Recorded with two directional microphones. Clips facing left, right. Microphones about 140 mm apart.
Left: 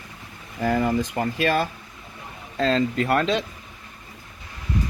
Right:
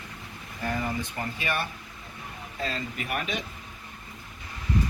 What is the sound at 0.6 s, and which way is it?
Speech, 70° left (ahead or behind).